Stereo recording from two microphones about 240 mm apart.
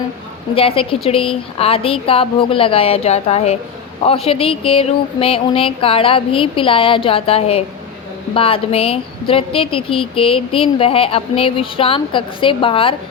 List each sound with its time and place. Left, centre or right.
0.5 s a woman's voice: left